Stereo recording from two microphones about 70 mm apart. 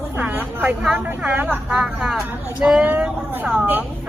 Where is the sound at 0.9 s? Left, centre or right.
Centre.